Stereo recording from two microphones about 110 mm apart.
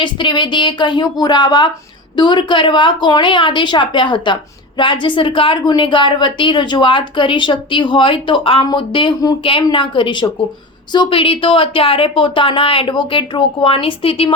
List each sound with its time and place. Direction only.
0.0 s a woman's voice: 45° left (ahead or behind)